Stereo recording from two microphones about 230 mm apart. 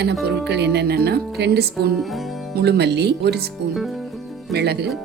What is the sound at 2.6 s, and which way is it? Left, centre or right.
Speech, right.